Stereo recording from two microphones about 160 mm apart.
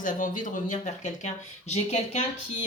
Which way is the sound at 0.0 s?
55° left (ahead or behind).